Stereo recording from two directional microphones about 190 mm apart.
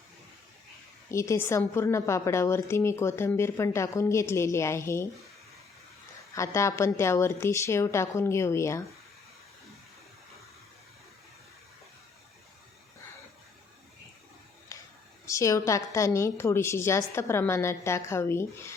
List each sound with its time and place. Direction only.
1.1 s a woman's voice: 15° left (ahead or behind)
6.3 s a woman's voice: 15° left (ahead or behind)
14.7 s whispering: 15° left (ahead or behind)
15.3 s a woman's voice: 15° left (ahead or behind)